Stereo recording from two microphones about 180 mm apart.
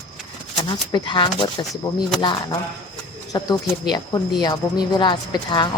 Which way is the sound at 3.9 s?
20° left (ahead or behind).